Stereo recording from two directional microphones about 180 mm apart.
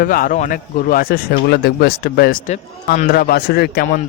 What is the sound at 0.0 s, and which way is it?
A man's voice, 50° left (ahead or behind).